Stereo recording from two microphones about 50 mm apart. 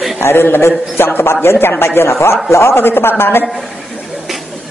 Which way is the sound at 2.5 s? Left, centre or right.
Left.